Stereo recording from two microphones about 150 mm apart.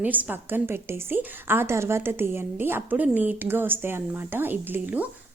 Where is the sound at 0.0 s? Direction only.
10° right (ahead or behind).